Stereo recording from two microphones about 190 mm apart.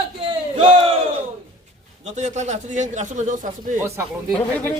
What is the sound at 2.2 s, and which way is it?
Speech, 40° right (ahead or behind).